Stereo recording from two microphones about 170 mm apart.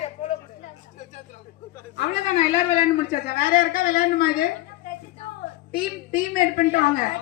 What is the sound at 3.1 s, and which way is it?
A woman's voice, 65° left (ahead or behind).